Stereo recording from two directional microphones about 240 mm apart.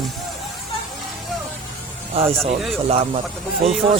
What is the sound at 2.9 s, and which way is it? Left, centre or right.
Speech, right.